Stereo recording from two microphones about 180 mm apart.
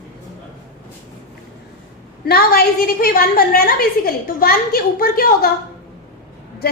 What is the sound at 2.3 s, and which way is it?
A woman's voice, 60° left (ahead or behind).